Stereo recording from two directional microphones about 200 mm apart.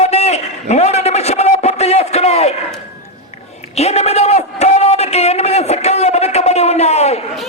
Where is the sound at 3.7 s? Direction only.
30° left (ahead or behind).